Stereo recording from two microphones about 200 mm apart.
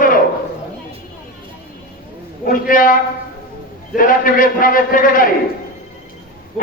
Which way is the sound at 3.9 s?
45° left (ahead or behind).